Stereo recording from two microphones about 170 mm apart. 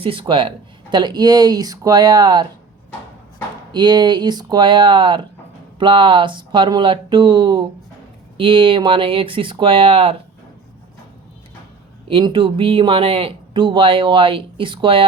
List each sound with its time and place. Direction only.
0.0 s speech: 30° right (ahead or behind)
3.7 s speech: 25° right (ahead or behind)
12.0 s speech: 30° right (ahead or behind)